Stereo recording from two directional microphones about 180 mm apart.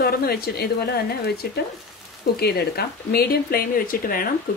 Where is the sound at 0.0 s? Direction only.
60° left (ahead or behind).